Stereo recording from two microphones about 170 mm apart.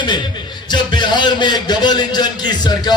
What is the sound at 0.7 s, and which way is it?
A man's voice, 25° left (ahead or behind).